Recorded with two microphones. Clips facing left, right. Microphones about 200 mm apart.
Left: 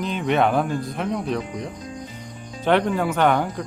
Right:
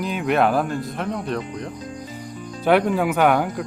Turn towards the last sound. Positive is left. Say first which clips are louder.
# right 1 dB
turn(degrees=-5)  # may be behind; listen again after turning